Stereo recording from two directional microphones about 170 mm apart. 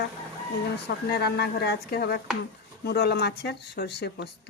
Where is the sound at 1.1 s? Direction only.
70° left (ahead or behind).